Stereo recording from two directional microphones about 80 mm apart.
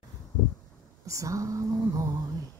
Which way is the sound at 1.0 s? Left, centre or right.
Right.